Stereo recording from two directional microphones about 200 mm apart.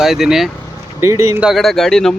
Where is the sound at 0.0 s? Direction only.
Centre (ahead or behind).